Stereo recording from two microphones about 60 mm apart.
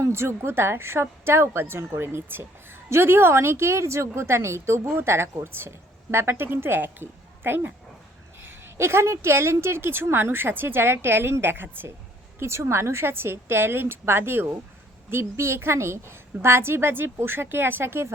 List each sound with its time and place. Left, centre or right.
0.1 s a woman's voice: right
12.4 s a woman's voice: right